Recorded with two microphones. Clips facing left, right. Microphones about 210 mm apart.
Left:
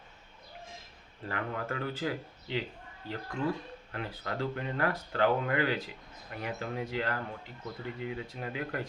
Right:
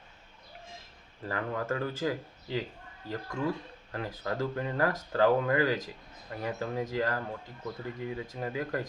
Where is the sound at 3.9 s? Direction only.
35° right (ahead or behind).